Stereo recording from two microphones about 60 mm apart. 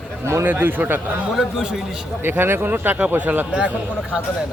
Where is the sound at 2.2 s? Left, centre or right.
Right.